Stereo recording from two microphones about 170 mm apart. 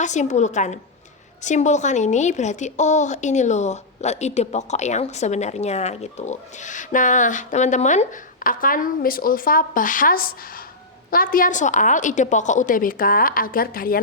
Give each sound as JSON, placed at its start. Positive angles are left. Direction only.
{"t": 0.0, "sound": "a woman's voice", "side_deg": 45}